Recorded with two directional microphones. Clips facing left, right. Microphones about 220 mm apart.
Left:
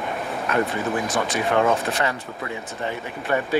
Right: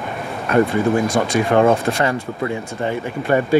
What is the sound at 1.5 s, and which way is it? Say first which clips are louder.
Speech: right 6 dB; 25° right (ahead or behind).